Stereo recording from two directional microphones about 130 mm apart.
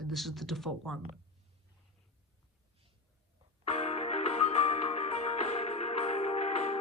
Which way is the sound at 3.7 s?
55° left (ahead or behind).